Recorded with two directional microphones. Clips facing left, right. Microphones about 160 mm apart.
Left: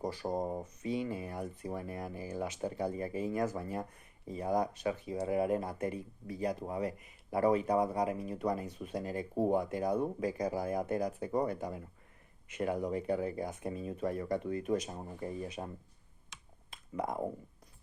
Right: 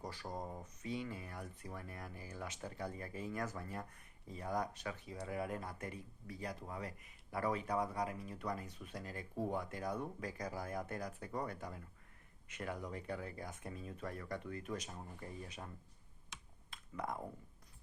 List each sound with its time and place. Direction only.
0.3 s speech: 40° left (ahead or behind)
0.8 s speech: 15° left (ahead or behind)
9.3 s speech: 40° left (ahead or behind)
9.6 s speech: 20° left (ahead or behind)
14.8 s speech: 30° left (ahead or behind)
15.2 s speech: 15° left (ahead or behind)
16.7 s a sound: 20° left (ahead or behind)